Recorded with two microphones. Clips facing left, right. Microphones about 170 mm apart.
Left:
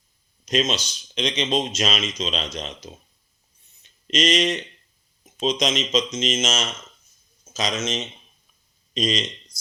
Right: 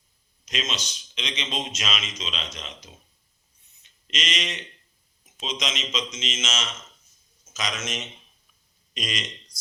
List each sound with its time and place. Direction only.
0.7 s speech: 35° left (ahead or behind)
4.0 s speech: 35° left (ahead or behind)
7.4 s speech: 30° left (ahead or behind)